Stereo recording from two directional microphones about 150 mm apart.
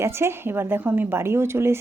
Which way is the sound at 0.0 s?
15° right (ahead or behind).